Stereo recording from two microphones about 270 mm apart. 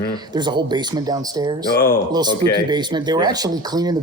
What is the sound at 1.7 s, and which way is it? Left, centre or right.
Speech, left.